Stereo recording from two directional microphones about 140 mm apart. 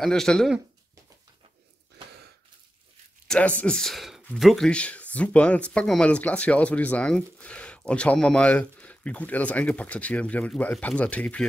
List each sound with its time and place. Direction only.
0.0 s speech: 5° left (ahead or behind)
3.3 s speech: 10° left (ahead or behind)